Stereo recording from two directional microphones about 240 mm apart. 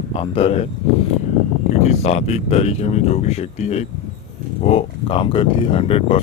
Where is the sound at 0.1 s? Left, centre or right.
Left.